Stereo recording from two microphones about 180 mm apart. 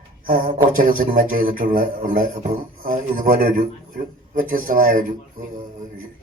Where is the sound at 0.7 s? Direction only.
50° right (ahead or behind).